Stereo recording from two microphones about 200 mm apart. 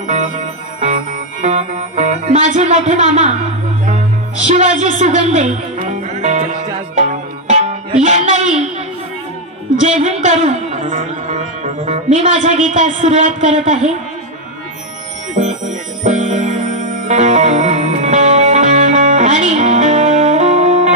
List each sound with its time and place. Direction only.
0.0 s music: 40° right (ahead or behind)
4.5 s speech: 40° right (ahead or behind)
7.0 s music: 35° right (ahead or behind)
9.8 s music: 35° right (ahead or behind)
15.3 s music: 40° right (ahead or behind)